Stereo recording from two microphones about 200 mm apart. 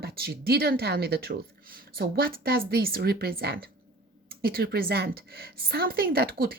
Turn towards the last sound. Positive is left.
turn(degrees=-50)  # may be behind; listen again after turning